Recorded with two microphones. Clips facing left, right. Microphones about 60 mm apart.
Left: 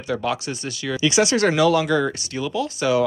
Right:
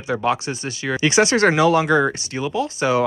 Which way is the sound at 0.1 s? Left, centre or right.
Right.